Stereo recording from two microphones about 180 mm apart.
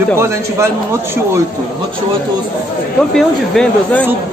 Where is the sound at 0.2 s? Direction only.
15° right (ahead or behind).